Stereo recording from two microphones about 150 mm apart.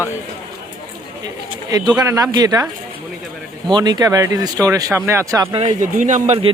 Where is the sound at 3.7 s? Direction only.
25° right (ahead or behind).